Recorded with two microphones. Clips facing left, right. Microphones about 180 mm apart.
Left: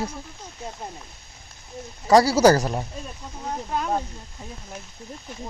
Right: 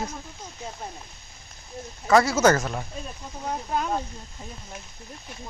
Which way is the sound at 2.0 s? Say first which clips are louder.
Left 3 dB; 35° left (ahead or behind).